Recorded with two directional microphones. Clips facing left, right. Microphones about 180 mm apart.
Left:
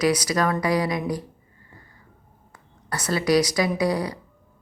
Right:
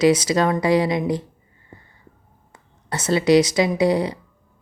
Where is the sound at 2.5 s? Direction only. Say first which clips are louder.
Right 3 dB; 25° right (ahead or behind).